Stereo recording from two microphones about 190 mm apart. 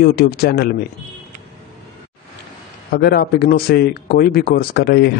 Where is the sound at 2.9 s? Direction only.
55° left (ahead or behind).